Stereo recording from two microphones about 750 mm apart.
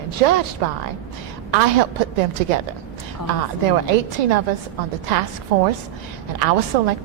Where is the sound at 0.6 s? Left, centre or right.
Right.